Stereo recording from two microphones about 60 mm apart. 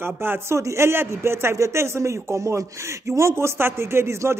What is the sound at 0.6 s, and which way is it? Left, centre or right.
A man's voice, right.